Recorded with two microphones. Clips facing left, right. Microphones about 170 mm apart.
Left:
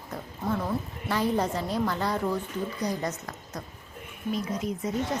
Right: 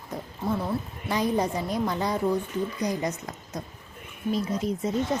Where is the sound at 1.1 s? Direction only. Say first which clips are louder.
Right 1 dB; 15° right (ahead or behind).